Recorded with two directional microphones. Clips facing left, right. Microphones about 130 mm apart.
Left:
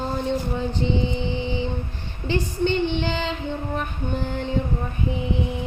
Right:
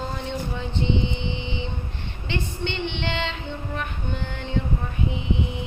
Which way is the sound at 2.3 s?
40° left (ahead or behind).